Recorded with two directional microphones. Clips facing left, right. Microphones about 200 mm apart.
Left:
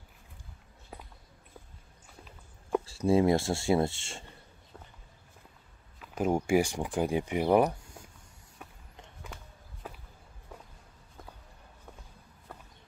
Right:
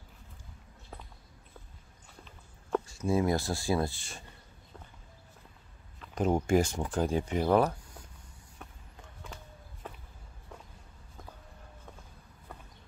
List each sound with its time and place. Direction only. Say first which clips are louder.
0.9 s walk: left 1 dB; 10° left (ahead or behind)
2.8 s speech: left 6 dB; 30° left (ahead or behind)
5.9 s speech: even; 10° left (ahead or behind)
8.6 s run: even; 10° left (ahead or behind)
9.8 s a sound: left 1 dB; centre (ahead or behind)